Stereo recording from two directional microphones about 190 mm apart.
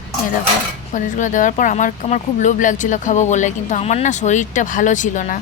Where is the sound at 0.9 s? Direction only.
40° left (ahead or behind).